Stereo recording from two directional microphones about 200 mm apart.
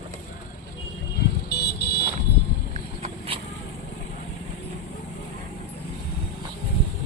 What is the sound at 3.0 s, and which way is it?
Vehicle, 30° right (ahead or behind).